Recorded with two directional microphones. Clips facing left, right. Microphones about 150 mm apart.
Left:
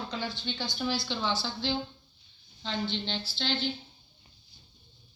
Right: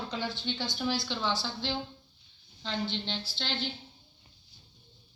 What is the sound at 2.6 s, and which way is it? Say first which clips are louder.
Speech: left 1 dB; 10° right (ahead or behind).